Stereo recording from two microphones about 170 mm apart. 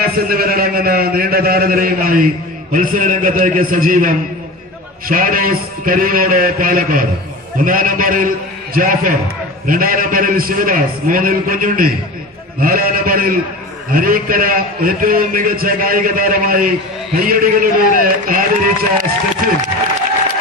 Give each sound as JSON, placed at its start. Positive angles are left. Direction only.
{"t": 0.0, "sound": "a man's voice", "side_deg": -60}